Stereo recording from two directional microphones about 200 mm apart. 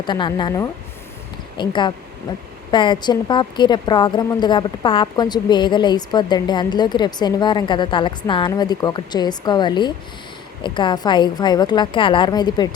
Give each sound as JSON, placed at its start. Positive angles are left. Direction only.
{"t": 0.0, "sound": "a woman's voice", "side_deg": 20}